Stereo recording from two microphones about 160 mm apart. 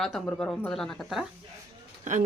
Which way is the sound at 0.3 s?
5° left (ahead or behind).